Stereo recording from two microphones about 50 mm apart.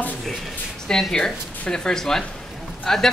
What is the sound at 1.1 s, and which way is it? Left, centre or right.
A woman's voice, centre.